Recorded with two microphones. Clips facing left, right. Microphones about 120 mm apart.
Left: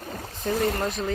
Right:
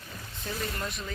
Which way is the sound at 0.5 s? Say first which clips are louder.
Left 10 dB; 65° left (ahead or behind).